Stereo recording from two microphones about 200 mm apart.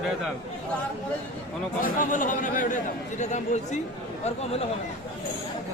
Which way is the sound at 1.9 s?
40° left (ahead or behind).